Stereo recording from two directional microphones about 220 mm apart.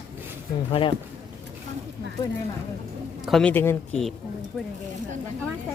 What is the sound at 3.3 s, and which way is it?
Speech, 5° left (ahead or behind).